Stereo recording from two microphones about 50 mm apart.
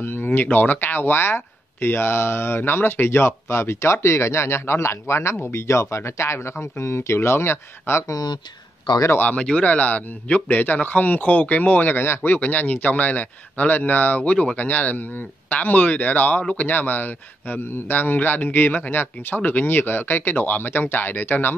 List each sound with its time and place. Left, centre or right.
0.0 s speech: left
9.3 s a man's voice: left
10.6 s a man's voice: left
12.2 s a man's voice: left